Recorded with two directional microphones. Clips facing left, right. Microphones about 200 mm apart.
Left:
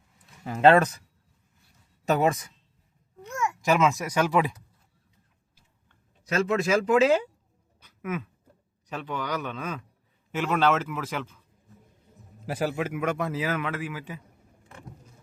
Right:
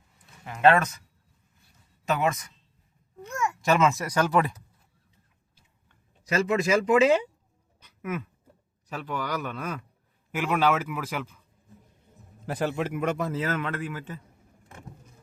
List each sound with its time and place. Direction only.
0.4 s speech: 30° left (ahead or behind)
2.0 s speech: 35° left (ahead or behind)
3.6 s a man's voice: centre (ahead or behind)
5.9 s speech: centre (ahead or behind)
8.0 s a man's voice: 10° right (ahead or behind)
12.5 s a man's voice: 5° left (ahead or behind)